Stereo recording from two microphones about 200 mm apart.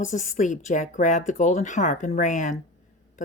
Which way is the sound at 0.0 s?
40° left (ahead or behind).